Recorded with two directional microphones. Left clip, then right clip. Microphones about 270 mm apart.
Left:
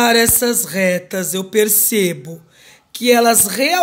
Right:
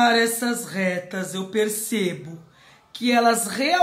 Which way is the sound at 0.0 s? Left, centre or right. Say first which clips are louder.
Left 5 dB; left.